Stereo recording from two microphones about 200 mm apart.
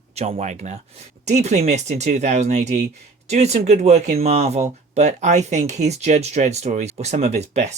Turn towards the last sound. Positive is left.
turn(degrees=-35)  # may be behind; listen again after turning